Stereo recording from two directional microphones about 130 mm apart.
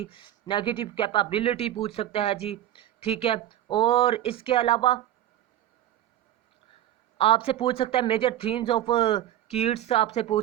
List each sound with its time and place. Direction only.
0.0 s speech: 40° left (ahead or behind)
7.2 s speech: 50° left (ahead or behind)